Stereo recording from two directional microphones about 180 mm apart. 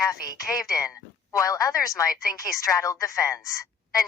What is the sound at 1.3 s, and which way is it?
Speech, 20° left (ahead or behind).